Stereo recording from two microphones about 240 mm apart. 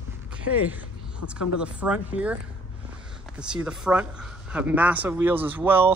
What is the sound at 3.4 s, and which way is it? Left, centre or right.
Speech, centre.